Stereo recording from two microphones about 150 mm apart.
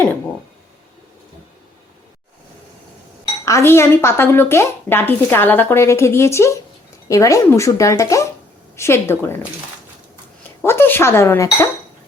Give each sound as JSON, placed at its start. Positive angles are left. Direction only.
{"t": 3.4, "sound": "a woman's voice", "side_deg": 20}
{"t": 10.6, "sound": "speech", "side_deg": 15}